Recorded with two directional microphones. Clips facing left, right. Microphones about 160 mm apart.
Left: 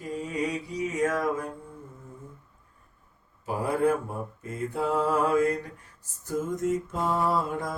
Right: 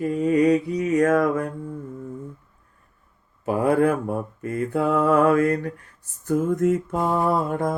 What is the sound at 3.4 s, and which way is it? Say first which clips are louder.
Mantra: right 6 dB; 65° right (ahead or behind).